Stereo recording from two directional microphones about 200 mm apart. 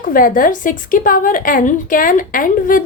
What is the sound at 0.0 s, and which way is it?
A woman's voice, 45° left (ahead or behind).